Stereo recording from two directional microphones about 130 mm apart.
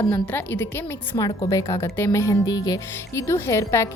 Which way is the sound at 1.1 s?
35° left (ahead or behind).